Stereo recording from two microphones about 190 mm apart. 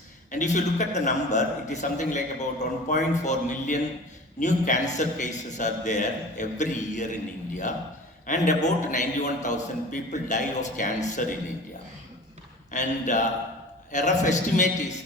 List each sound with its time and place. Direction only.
0.3 s a man's voice: 40° left (ahead or behind)
12.7 s a man's voice: 40° left (ahead or behind)